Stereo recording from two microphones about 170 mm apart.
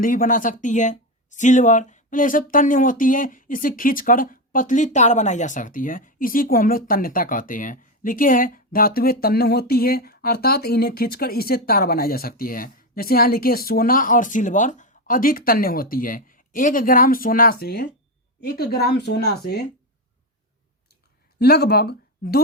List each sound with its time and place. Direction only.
0.0 s a woman's voice: 55° left (ahead or behind); by 19.6 s 70° left (ahead or behind)
21.3 s speech: 65° left (ahead or behind)